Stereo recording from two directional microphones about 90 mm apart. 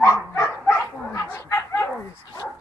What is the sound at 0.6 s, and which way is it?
Bow-wow, 20° left (ahead or behind).